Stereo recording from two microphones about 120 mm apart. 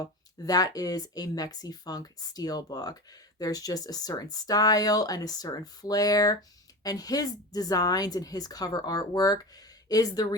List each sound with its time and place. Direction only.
0.4 s speech: 30° left (ahead or behind)